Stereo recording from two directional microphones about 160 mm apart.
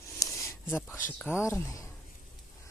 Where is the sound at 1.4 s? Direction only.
20° left (ahead or behind).